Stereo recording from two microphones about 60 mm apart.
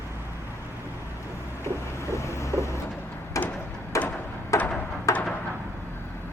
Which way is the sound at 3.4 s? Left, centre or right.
Left.